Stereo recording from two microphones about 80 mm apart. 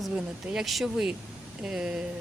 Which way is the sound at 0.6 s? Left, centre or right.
Centre.